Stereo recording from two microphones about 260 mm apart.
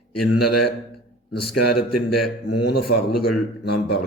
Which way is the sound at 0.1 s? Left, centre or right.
Left.